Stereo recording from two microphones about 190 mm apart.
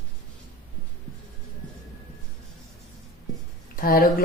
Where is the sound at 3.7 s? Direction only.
50° left (ahead or behind).